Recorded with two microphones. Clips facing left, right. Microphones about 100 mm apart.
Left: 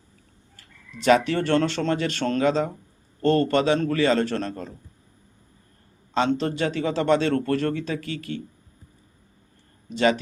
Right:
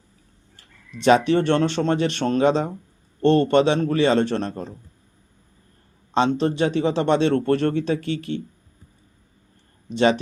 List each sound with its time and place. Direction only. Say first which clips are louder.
0.5 s speech: right 3 dB; 25° right (ahead or behind)
6.1 s speech: right 3 dB; 25° right (ahead or behind)